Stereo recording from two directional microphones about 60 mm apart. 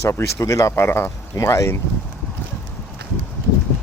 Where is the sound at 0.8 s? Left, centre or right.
Left.